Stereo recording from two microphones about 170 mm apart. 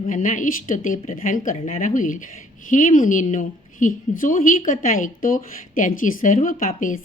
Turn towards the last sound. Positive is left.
turn(degrees=50)  # may be behind; listen again after turning